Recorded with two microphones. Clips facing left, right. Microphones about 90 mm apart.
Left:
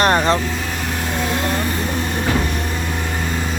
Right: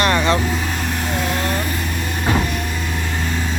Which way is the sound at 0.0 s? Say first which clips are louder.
Left 2 dB; 40° left (ahead or behind).